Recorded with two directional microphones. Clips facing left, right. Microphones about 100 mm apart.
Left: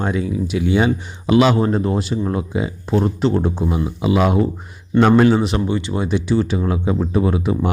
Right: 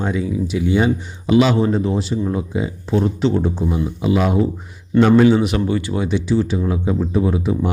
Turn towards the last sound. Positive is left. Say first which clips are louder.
# even
turn(degrees=65)  # may be behind; listen again after turning